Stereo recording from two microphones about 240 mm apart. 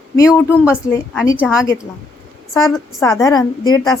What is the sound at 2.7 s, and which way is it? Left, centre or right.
Speech, centre.